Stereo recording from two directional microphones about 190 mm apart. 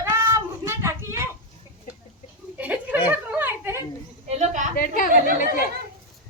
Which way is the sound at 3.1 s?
10° right (ahead or behind).